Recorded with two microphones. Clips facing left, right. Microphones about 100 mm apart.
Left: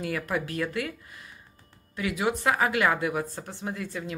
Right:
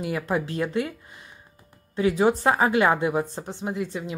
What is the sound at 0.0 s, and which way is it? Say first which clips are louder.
Speech: right 3 dB; 25° right (ahead or behind).